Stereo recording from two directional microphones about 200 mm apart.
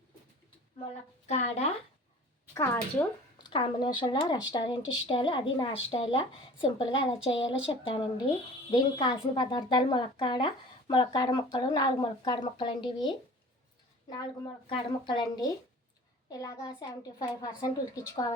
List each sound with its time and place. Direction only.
1.3 s speech: 35° left (ahead or behind)
2.6 s a woman's voice: 15° left (ahead or behind)
8.7 s a woman's voice: 25° left (ahead or behind)